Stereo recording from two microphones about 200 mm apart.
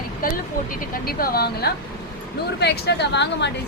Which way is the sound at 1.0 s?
50° left (ahead or behind).